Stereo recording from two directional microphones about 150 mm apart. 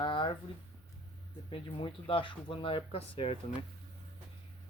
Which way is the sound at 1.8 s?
35° left (ahead or behind).